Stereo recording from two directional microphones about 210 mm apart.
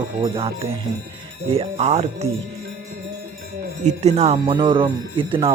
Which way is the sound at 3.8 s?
35° right (ahead or behind).